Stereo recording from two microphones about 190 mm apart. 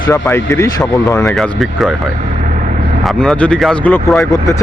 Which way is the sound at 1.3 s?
Centre (ahead or behind).